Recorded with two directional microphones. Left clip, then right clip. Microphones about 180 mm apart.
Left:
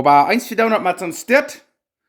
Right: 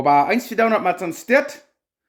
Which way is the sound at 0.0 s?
30° left (ahead or behind).